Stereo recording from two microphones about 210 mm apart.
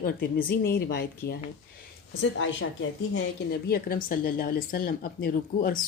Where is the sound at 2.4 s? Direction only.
65° left (ahead or behind).